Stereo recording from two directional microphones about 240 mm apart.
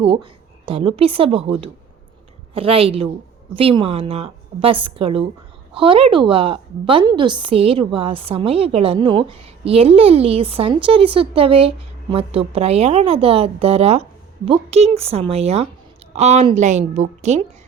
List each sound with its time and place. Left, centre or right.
0.0 s a woman's voice: right